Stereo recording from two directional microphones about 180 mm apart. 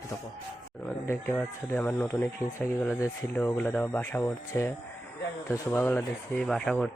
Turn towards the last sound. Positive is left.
turn(degrees=5)  # may be behind; listen again after turning